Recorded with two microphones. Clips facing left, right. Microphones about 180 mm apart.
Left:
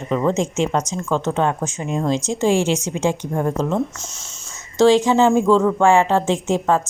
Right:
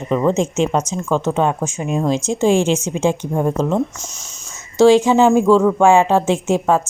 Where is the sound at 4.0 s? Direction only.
25° left (ahead or behind).